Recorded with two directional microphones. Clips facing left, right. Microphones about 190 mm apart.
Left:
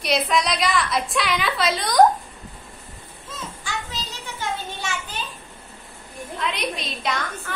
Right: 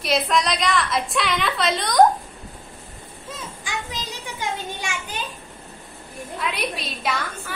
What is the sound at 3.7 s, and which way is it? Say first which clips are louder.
Child singing: even; 15° right (ahead or behind).